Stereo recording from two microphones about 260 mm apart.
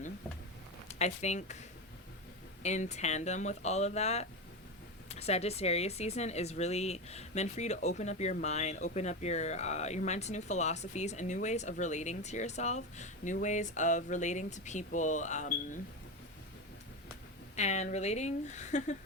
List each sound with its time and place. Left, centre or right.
0.9 s speech: left
2.6 s speech: left
17.6 s speech: left